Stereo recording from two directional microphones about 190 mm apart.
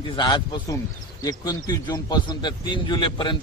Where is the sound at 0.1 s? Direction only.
25° left (ahead or behind).